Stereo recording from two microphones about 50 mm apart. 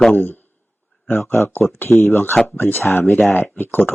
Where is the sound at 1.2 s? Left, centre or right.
Left.